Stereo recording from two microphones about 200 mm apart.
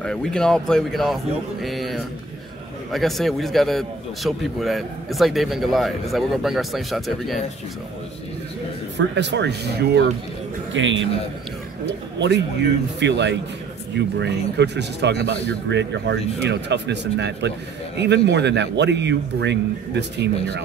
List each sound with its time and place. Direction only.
0.0 s a man's voice: 5° left (ahead or behind)
8.9 s speech: 60° right (ahead or behind)
10.7 s a man's voice: 70° right (ahead or behind)
13.0 s speech: 60° right (ahead or behind)